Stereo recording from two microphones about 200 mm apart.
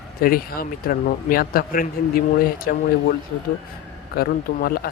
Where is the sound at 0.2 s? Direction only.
45° left (ahead or behind).